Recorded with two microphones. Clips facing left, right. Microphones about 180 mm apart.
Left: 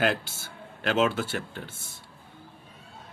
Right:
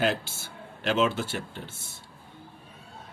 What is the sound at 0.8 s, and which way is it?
Speech, 50° left (ahead or behind).